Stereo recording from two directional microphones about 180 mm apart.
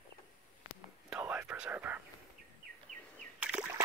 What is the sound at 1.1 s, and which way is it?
Whispering, 10° right (ahead or behind).